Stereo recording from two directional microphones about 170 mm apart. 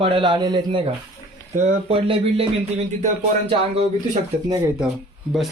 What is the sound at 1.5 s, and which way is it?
Speech, 40° right (ahead or behind).